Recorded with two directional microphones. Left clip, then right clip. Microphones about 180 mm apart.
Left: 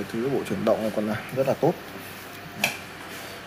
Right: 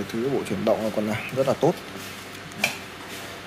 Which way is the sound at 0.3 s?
Centre (ahead or behind).